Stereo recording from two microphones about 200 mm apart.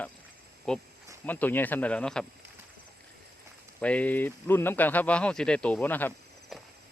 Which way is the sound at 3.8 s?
5° left (ahead or behind).